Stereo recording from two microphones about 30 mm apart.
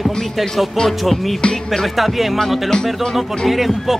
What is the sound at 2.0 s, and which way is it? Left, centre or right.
Speech, centre.